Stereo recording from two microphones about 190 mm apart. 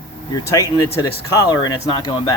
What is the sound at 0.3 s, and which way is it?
Speech, 20° left (ahead or behind).